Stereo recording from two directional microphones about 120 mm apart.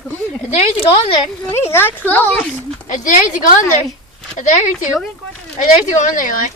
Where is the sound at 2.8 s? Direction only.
90° left.